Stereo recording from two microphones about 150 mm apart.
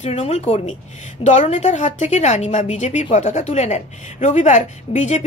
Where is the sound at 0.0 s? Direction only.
45° left (ahead or behind).